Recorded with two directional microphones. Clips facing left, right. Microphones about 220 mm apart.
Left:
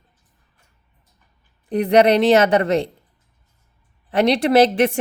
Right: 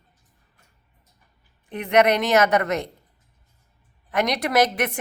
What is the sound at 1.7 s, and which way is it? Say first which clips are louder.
A woman's voice: left 5 dB; 35° left (ahead or behind).